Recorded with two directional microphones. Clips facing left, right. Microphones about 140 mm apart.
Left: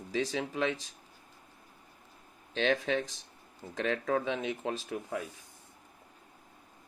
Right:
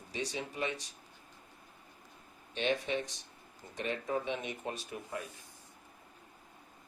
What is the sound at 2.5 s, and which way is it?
Speech, 90° left.